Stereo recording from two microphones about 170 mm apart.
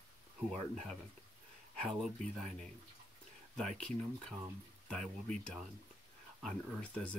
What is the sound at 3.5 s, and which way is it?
Speech, 5° left (ahead or behind).